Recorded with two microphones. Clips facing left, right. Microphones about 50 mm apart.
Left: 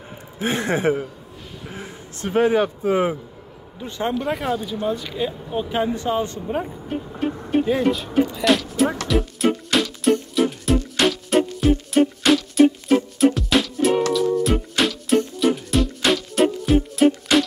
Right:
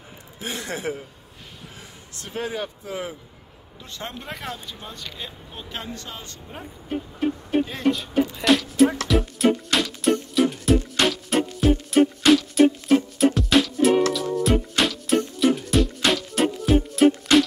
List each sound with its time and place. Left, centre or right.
0.4 s a man's voice: left
3.8 s speech: centre
7.6 s speech: centre
8.5 s music: centre